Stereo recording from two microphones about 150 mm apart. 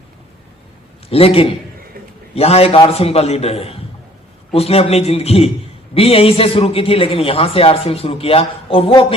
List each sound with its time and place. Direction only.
1.1 s a man's voice: 40° left (ahead or behind)